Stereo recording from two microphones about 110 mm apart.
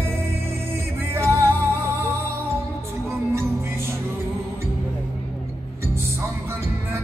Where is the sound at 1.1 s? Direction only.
25° right (ahead or behind).